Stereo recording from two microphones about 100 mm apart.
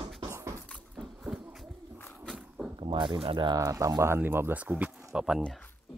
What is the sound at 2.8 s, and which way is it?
Speech, 50° right (ahead or behind).